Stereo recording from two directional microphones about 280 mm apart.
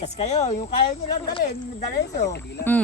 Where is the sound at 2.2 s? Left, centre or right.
Left.